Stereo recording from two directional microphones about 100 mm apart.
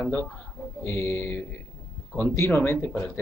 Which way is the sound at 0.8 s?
25° left (ahead or behind).